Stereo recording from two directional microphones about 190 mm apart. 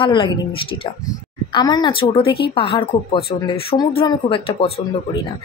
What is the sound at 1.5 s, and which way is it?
Speech, 20° left (ahead or behind).